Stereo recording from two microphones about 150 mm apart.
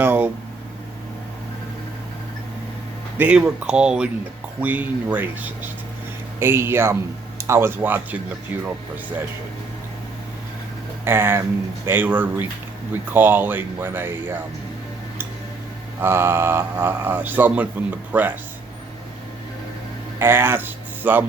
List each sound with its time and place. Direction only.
0.0 s a sound: 10° right (ahead or behind)
3.2 s speech: 10° right (ahead or behind)
11.0 s speech: 15° right (ahead or behind)
16.0 s speech: 15° right (ahead or behind)
20.1 s speech: 15° right (ahead or behind)